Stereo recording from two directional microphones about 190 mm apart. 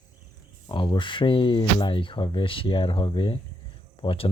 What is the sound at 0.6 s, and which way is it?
Speech, 25° left (ahead or behind).